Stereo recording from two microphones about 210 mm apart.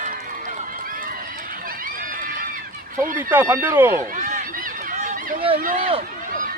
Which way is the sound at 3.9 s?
35° right (ahead or behind).